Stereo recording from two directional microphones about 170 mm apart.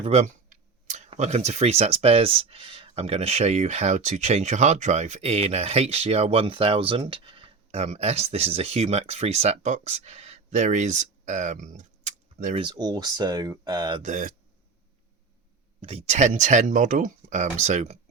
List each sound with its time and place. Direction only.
0.0 s speech: 40° right (ahead or behind)
12.5 s speech: 25° right (ahead or behind)
14.0 s speech: 50° right (ahead or behind)
15.8 s speech: 35° right (ahead or behind)